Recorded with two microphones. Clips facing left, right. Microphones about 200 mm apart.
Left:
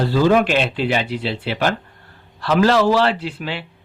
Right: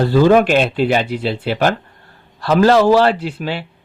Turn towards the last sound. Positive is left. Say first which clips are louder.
# right 4 dB
turn(degrees=-40)  # may be behind; listen again after turning